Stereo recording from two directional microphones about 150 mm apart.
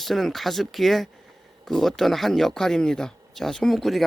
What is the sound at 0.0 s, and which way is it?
Speech, centre (ahead or behind).